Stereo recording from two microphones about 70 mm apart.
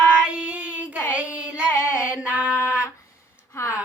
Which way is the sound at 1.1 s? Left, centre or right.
Centre.